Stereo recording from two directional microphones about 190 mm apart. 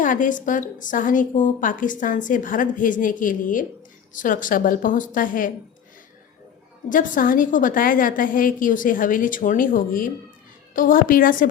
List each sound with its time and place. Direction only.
0.0 s a woman's voice: 45° left (ahead or behind)
6.9 s a woman's voice: 45° left (ahead or behind)